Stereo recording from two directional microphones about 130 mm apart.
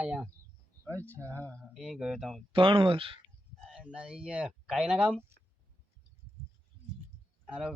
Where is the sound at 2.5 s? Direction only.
40° right (ahead or behind).